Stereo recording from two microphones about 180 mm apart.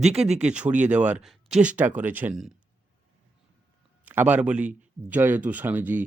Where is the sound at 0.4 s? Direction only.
5° right (ahead or behind).